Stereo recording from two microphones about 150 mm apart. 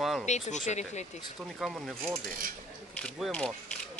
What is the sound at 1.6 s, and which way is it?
Speech, centre (ahead or behind).